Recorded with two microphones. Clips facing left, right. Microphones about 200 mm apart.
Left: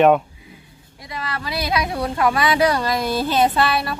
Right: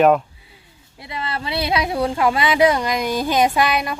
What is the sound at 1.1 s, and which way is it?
Speech, 25° right (ahead or behind).